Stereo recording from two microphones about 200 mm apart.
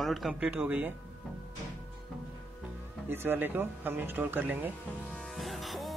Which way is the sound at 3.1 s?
10° right (ahead or behind).